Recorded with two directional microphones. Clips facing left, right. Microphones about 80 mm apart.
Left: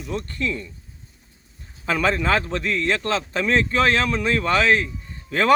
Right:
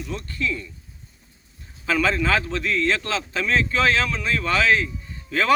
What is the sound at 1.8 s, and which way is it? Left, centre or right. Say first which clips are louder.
Speech: even; left.